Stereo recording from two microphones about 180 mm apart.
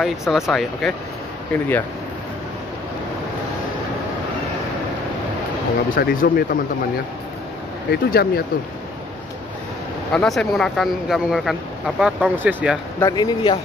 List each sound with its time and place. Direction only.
0.3 s speech: centre (ahead or behind)
5.9 s speech: 50° left (ahead or behind)
7.9 s speech: 60° left (ahead or behind)
10.1 s speech: 5° left (ahead or behind)
13.0 s speech: 20° left (ahead or behind)